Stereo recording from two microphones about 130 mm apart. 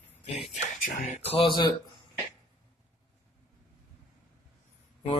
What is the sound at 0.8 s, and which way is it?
Speech, 80° left.